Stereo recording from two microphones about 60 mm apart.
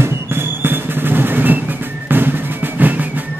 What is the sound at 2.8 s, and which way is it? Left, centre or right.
Music, right.